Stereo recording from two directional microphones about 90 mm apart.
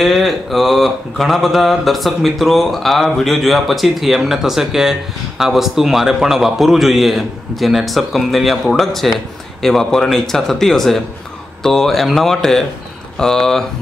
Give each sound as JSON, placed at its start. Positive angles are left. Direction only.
{"t": 0.0, "sound": "mantra", "side_deg": 0}